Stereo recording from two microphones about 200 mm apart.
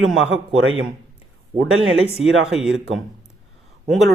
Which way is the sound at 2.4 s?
5° right (ahead or behind).